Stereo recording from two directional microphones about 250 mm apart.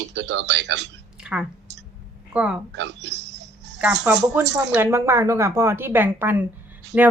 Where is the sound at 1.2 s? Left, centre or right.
Centre.